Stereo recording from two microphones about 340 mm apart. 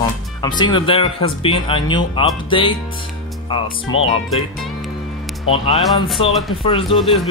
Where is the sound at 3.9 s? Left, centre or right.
Centre.